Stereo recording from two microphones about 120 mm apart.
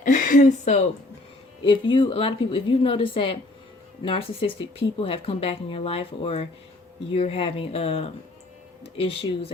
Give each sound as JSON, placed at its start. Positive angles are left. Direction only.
{"t": 0.0, "sound": "speech", "side_deg": 90}
{"t": 1.6, "sound": "speech", "side_deg": 45}